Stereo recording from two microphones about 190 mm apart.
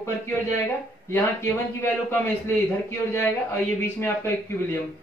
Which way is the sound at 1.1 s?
10° left (ahead or behind).